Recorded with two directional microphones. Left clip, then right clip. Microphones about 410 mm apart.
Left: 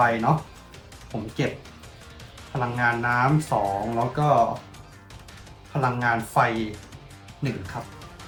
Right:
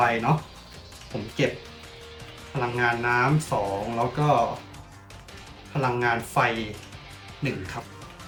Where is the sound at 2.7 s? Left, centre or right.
Centre.